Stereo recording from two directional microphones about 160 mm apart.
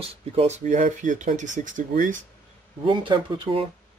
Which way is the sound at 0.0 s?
35° right (ahead or behind).